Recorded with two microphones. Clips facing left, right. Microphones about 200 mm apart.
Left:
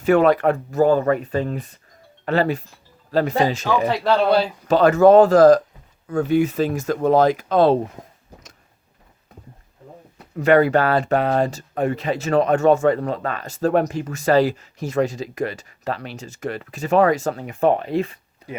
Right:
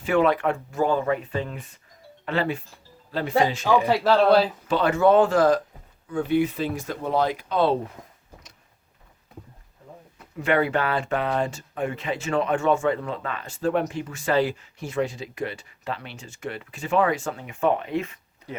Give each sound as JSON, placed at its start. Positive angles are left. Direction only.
{"t": 0.0, "sound": "speech", "side_deg": 45}
{"t": 3.8, "sound": "speech", "side_deg": -5}
{"t": 4.7, "sound": "speech", "side_deg": 40}
{"t": 10.3, "sound": "speech", "side_deg": 40}
{"t": 18.4, "sound": "a sound", "side_deg": 35}